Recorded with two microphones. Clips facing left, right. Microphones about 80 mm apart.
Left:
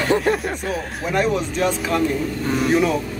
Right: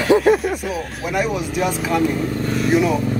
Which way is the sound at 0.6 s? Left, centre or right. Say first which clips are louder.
Even; left.